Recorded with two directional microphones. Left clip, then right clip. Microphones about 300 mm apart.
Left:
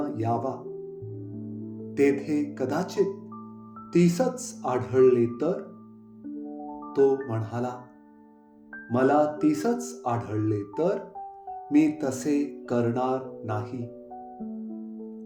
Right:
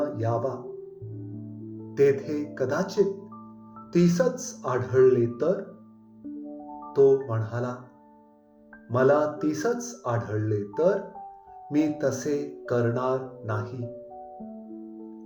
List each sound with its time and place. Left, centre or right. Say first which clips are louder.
0.2 s speech: even; left
2.0 s speech: right 1 dB; left
6.9 s speech: right 3 dB; left
8.9 s speech: right 1 dB; left